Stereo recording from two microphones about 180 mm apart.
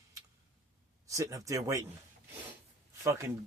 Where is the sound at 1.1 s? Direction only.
20° right (ahead or behind).